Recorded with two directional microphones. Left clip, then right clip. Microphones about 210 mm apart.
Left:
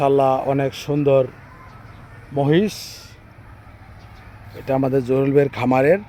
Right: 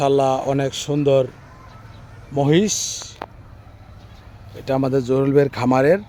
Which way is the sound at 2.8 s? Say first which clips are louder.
Right 9 dB; 40° right (ahead or behind).